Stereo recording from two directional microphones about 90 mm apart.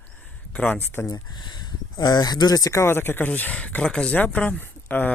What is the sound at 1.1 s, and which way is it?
Speech, 55° left (ahead or behind).